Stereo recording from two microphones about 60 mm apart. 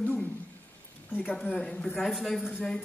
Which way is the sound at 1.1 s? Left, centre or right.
Left.